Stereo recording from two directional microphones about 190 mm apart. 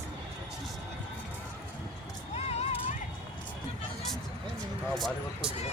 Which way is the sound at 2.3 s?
35° left (ahead or behind).